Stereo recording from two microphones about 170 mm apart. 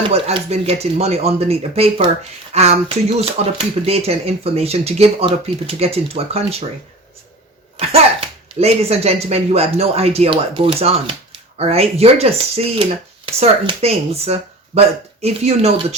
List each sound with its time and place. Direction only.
0.0 s speech: 35° right (ahead or behind)
7.8 s speech: 35° right (ahead or behind)